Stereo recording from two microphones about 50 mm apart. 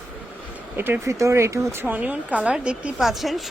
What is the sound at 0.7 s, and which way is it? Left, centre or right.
Speech, right.